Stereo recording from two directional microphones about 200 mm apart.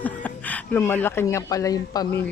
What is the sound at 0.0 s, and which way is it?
Speech, 10° left (ahead or behind).